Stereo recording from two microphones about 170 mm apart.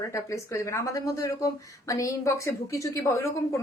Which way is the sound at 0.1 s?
15° left (ahead or behind).